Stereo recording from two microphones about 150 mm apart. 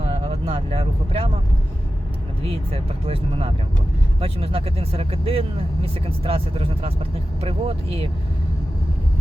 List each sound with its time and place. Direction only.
0.1 s vehicle: 40° right (ahead or behind)
2.4 s speech: 40° right (ahead or behind)